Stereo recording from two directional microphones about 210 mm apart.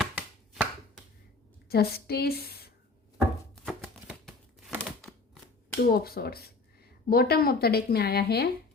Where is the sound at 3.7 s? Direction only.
Centre (ahead or behind).